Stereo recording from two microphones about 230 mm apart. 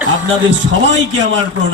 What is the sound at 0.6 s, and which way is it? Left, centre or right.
Speech, right.